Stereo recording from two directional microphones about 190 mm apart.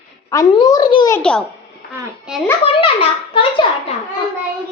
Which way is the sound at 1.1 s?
5° left (ahead or behind).